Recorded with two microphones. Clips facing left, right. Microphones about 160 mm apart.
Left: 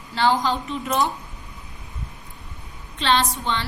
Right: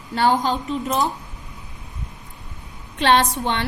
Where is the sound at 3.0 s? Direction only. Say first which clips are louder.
Right 4 dB; 60° right (ahead or behind).